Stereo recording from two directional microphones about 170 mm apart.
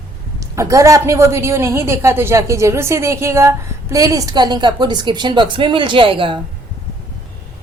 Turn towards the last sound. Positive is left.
turn(degrees=-30)  # may be behind; listen again after turning